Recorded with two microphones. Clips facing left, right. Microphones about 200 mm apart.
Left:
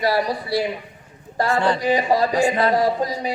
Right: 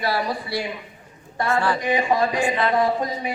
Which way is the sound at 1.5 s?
20° left (ahead or behind).